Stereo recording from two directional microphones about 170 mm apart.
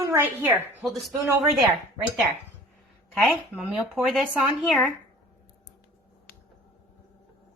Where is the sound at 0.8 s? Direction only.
Centre (ahead or behind).